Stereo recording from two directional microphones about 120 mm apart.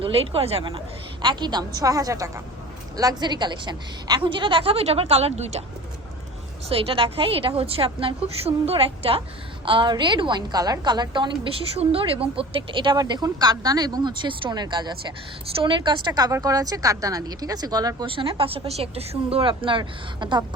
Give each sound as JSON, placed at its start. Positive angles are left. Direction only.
{"t": 0.0, "sound": "speech", "side_deg": -55}
{"t": 1.2, "sound": "a woman's voice", "side_deg": -40}
{"t": 6.7, "sound": "a woman's voice", "side_deg": -50}
{"t": 11.8, "sound": "a woman's voice", "side_deg": -50}
{"t": 18.0, "sound": "a woman's voice", "side_deg": -45}